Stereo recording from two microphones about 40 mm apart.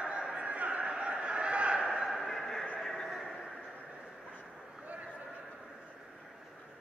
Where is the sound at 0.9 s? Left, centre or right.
Right.